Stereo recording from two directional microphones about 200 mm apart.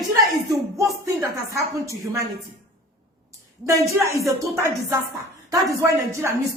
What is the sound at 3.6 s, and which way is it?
Speech, 15° right (ahead or behind).